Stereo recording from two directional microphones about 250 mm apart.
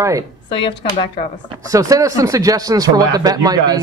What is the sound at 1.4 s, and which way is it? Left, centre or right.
Speech, centre.